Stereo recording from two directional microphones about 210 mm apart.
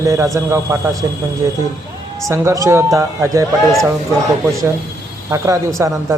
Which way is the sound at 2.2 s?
15° right (ahead or behind).